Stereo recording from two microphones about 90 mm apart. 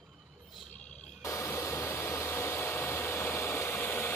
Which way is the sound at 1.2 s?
30° left (ahead or behind).